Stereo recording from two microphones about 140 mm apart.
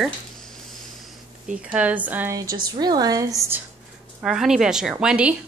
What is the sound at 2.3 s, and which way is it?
A woman's voice, 30° right (ahead or behind).